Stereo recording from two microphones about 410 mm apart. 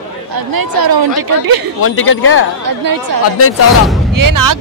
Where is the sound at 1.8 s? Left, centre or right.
Left.